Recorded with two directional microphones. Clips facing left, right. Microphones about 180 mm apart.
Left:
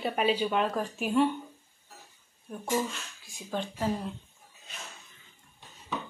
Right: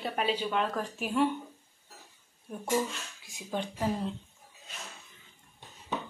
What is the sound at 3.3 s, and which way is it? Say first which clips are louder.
Speech: even; 20° right (ahead or behind).